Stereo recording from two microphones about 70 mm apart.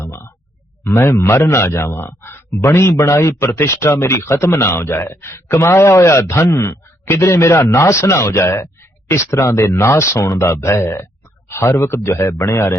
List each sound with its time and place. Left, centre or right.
0.0 s a sound: left
0.9 s speech: left
2.6 s speech: left